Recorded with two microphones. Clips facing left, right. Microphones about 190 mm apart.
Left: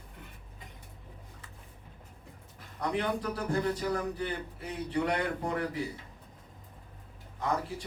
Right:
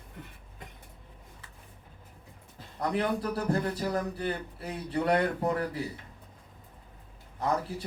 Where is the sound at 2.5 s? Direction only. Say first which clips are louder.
Right 2 dB; 30° right (ahead or behind).